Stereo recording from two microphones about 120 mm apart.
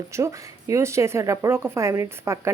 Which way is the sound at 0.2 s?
25° right (ahead or behind).